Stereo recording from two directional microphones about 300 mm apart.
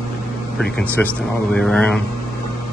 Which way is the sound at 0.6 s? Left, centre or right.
Centre.